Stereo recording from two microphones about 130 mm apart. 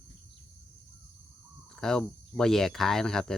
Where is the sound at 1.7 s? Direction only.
5° left (ahead or behind).